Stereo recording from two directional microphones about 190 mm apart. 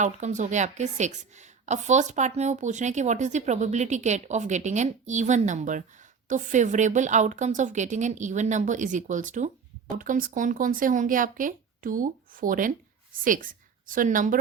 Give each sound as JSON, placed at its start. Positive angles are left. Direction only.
{"t": 0.0, "sound": "a woman's voice", "side_deg": -40}